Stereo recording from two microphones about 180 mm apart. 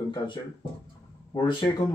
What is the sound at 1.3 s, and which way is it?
Speech, 25° left (ahead or behind).